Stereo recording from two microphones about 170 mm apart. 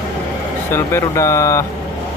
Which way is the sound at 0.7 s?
15° left (ahead or behind).